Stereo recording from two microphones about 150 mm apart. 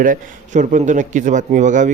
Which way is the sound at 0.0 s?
60° right (ahead or behind).